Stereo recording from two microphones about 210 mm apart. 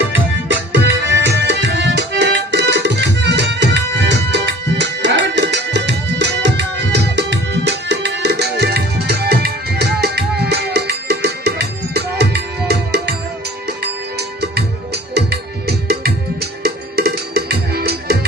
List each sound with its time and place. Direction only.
0.4 s music: 60° right (ahead or behind)